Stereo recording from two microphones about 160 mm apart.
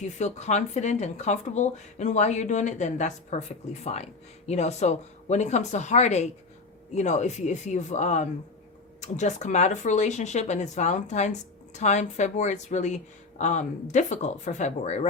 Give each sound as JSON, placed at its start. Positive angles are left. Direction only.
{"t": 0.0, "sound": "speech", "side_deg": 45}
{"t": 4.4, "sound": "speech", "side_deg": 45}